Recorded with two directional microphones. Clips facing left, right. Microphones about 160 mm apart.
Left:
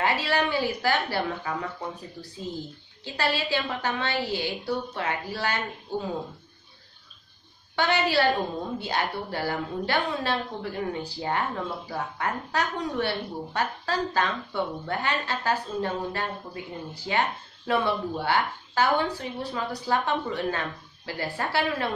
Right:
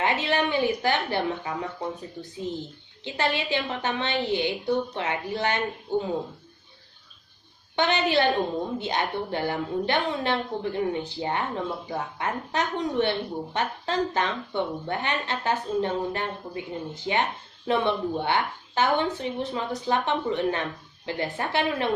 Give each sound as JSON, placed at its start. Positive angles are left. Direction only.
{"t": 0.0, "sound": "speech", "side_deg": -20}
{"t": 7.7, "sound": "speech", "side_deg": -20}